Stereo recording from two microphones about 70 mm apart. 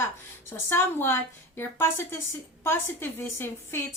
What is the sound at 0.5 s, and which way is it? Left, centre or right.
A woman's voice, left.